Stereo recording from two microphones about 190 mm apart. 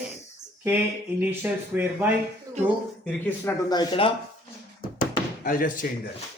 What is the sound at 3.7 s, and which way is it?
Speech, 25° left (ahead or behind).